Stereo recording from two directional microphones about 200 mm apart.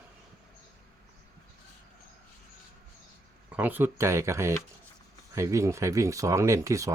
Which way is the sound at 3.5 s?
10° right (ahead or behind).